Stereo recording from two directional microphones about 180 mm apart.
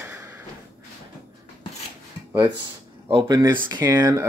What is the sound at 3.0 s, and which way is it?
Speech, 30° right (ahead or behind).